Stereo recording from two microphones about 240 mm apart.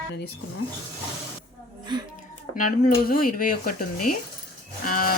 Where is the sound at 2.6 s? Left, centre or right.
Left.